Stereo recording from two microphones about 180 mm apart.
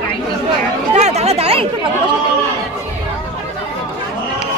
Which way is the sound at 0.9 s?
40° right (ahead or behind).